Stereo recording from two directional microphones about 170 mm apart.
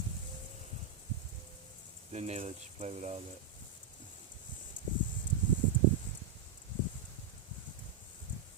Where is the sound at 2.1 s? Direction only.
40° right (ahead or behind).